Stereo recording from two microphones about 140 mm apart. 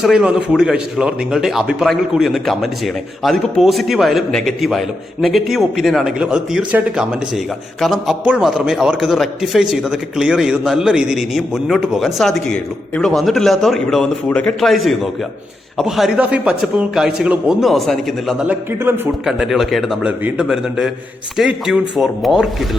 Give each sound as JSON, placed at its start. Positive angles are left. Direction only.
{"t": 0.0, "sound": "speech", "side_deg": -5}
{"t": 18.4, "sound": "a man's voice", "side_deg": -15}
{"t": 19.2, "sound": "speech", "side_deg": 0}